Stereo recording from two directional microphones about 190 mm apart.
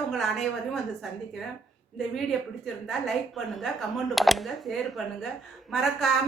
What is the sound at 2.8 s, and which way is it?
A woman's voice, centre (ahead or behind).